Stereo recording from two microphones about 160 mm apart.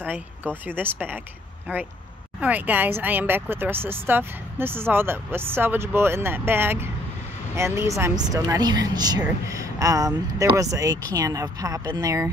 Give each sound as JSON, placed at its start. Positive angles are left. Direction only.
{"t": 0.0, "sound": "speech", "side_deg": -10}